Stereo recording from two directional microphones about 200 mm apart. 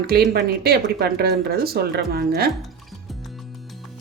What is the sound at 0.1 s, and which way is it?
Speech, 50° right (ahead or behind).